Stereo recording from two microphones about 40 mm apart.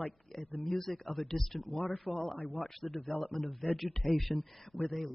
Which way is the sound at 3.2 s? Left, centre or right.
Centre.